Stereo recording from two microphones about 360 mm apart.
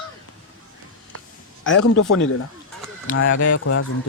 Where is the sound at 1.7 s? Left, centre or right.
Left.